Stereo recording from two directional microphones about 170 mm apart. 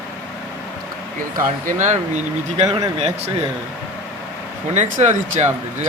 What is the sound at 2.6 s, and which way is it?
Speech, 20° right (ahead or behind).